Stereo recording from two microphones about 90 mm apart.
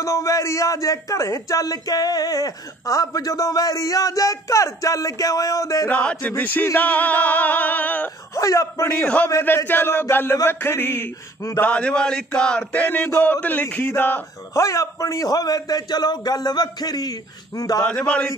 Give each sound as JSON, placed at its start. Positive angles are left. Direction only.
{"t": 0.0, "sound": "speech", "side_deg": 35}
{"t": 5.9, "sound": "music", "side_deg": 15}
{"t": 8.4, "sound": "speech", "side_deg": 40}
{"t": 9.0, "sound": "a sound", "side_deg": 15}
{"t": 9.7, "sound": "music", "side_deg": 25}
{"t": 11.6, "sound": "a sound", "side_deg": 15}
{"t": 13.8, "sound": "music", "side_deg": 20}
{"t": 14.6, "sound": "a man's voice", "side_deg": 35}
{"t": 17.8, "sound": "a sound", "side_deg": 10}